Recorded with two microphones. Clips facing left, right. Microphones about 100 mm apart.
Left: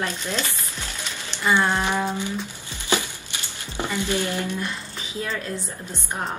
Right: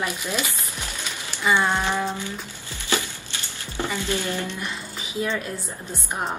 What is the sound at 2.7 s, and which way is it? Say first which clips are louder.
Music: left 1 dB; 20° left (ahead or behind).